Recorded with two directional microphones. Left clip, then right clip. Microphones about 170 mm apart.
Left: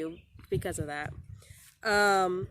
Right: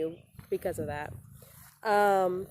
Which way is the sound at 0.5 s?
25° left (ahead or behind).